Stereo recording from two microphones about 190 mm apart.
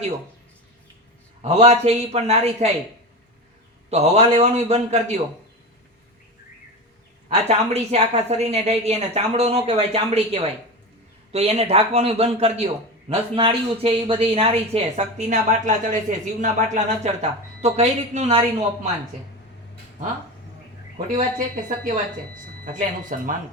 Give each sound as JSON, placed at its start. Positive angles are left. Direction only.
{"t": 1.4, "sound": "speech", "side_deg": -35}
{"t": 3.8, "sound": "speech", "side_deg": -35}
{"t": 7.3, "sound": "speech", "side_deg": -35}
{"t": 21.2, "sound": "speech", "side_deg": -45}